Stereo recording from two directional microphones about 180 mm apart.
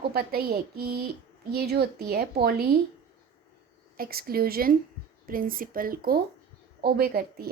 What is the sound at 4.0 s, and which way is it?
A woman's voice, 55° right (ahead or behind).